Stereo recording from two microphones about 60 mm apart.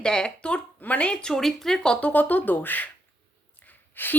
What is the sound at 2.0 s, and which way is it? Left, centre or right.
A woman's voice, left.